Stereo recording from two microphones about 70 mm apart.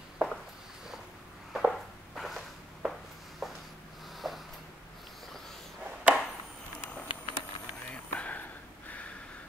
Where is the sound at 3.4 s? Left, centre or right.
Centre.